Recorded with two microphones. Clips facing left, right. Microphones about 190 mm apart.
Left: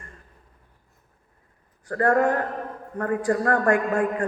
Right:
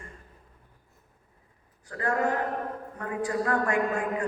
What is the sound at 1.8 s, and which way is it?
A man's voice, 50° left (ahead or behind).